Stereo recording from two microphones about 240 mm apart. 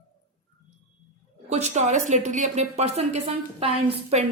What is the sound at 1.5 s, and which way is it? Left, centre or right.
A woman's voice, right.